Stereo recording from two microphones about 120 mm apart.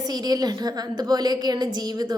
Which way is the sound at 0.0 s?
35° right (ahead or behind).